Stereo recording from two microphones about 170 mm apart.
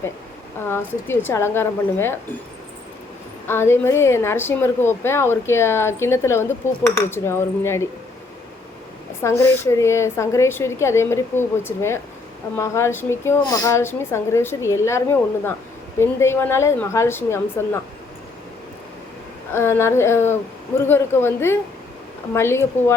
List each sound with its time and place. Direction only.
0.7 s a woman's voice: 15° left (ahead or behind)
3.4 s a woman's voice: 15° left (ahead or behind)
9.2 s a woman's voice: 15° left (ahead or behind)
19.5 s a woman's voice: 15° left (ahead or behind)